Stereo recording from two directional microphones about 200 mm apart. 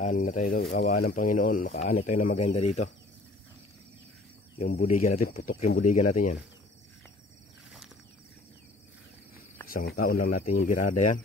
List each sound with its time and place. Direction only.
0.0 s speech: 40° left (ahead or behind)
4.6 s speech: 45° left (ahead or behind)
9.7 s speech: 45° left (ahead or behind)